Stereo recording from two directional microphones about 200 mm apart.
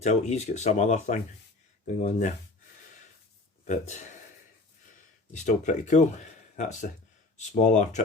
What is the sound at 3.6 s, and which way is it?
Speech, 35° left (ahead or behind).